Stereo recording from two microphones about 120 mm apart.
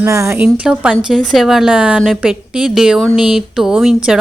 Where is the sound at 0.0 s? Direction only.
25° right (ahead or behind).